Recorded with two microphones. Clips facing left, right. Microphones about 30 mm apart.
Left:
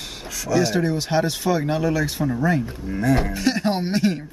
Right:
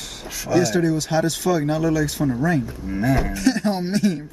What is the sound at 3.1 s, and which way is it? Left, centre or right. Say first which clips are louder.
Speech: even; left.